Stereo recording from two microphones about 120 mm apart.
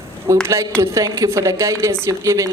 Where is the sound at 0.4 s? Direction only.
20° right (ahead or behind).